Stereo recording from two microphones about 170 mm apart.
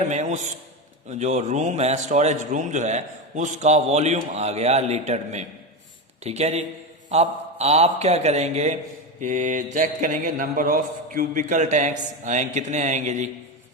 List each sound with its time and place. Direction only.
0.1 s a man's voice: 45° right (ahead or behind)